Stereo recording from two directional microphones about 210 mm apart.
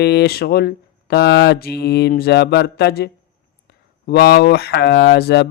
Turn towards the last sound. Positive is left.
turn(degrees=50)  # may be behind; listen again after turning